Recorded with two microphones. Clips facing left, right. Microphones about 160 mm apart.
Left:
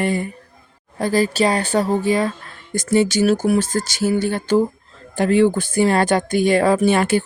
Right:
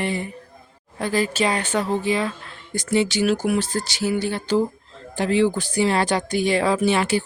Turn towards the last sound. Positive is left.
turn(degrees=50)  # may be behind; listen again after turning